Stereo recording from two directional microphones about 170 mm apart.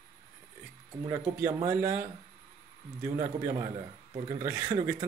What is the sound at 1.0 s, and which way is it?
Speech, 15° right (ahead or behind).